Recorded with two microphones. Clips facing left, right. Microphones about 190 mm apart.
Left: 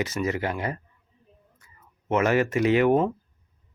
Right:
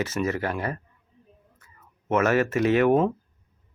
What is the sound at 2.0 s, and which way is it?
Speech, 15° left (ahead or behind).